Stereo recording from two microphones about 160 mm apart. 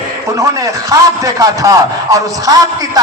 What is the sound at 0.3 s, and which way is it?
A man's voice, 20° right (ahead or behind).